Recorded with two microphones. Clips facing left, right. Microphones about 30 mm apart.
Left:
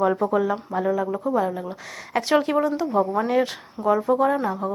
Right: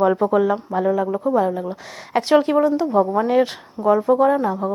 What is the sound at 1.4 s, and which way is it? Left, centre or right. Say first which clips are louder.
Speech: right 4 dB; centre.